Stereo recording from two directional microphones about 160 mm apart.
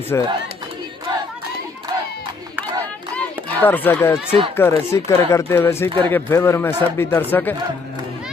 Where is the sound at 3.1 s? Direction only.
10° left (ahead or behind).